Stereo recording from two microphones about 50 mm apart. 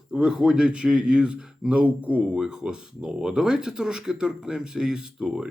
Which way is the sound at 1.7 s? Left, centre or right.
Right.